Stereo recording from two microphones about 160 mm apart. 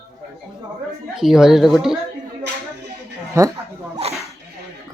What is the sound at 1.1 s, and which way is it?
Speech, 5° right (ahead or behind).